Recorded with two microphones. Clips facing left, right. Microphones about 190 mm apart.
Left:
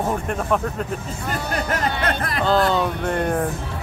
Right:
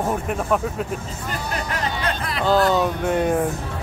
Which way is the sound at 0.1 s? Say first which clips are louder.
Even; 5° right (ahead or behind).